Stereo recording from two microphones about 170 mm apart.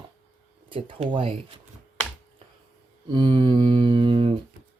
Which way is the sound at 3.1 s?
30° right (ahead or behind).